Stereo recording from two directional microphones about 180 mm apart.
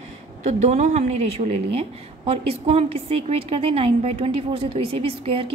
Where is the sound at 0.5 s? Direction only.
40° right (ahead or behind).